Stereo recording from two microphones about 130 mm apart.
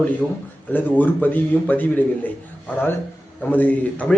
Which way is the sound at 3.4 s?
15° left (ahead or behind).